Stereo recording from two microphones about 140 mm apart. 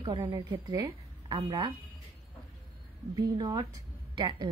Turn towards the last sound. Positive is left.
turn(degrees=-30)  # may be behind; listen again after turning